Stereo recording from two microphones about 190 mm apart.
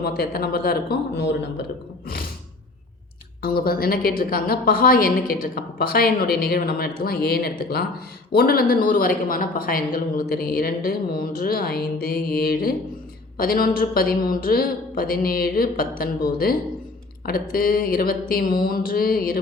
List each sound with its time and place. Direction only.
0.0 s a man's voice: 55° left (ahead or behind)
3.4 s a woman's voice: 50° left (ahead or behind)